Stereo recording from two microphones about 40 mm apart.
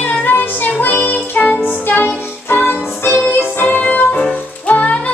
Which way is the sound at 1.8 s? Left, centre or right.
Left.